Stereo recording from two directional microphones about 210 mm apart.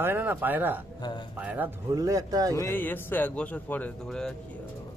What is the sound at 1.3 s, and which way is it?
Speech, 5° right (ahead or behind).